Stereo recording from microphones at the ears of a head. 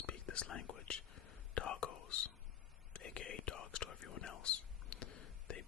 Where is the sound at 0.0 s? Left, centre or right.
Left.